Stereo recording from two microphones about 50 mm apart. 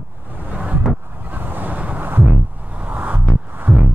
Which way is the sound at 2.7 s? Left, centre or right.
Right.